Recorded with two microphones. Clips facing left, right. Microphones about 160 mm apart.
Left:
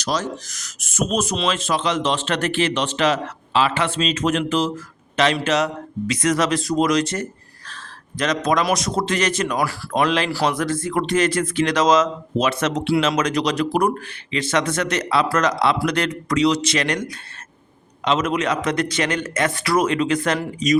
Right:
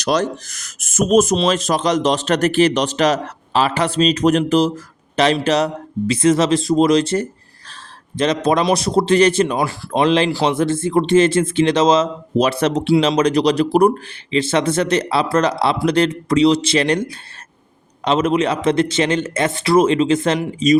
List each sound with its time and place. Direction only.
0.0 s a man's voice: 65° right (ahead or behind); by 20.7 s 25° right (ahead or behind)